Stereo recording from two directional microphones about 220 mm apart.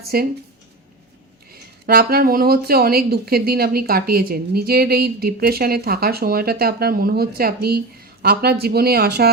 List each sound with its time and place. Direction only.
0.1 s speech: 45° right (ahead or behind)
1.9 s speech: 45° right (ahead or behind)